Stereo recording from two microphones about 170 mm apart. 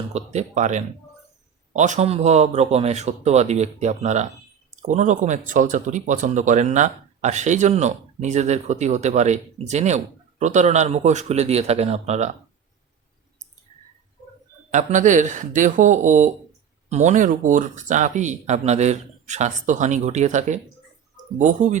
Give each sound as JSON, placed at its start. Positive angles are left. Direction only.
{"t": 0.1, "sound": "speech", "side_deg": -40}
{"t": 14.7, "sound": "speech", "side_deg": -45}